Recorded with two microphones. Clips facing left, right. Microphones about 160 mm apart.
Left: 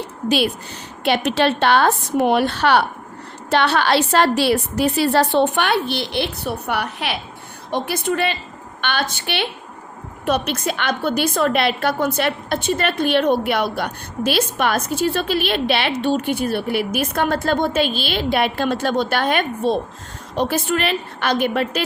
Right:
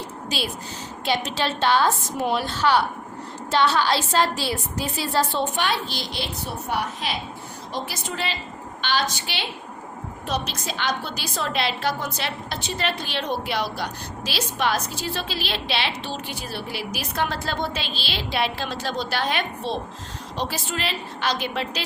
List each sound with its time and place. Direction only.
0.3 s a woman's voice: 60° left (ahead or behind)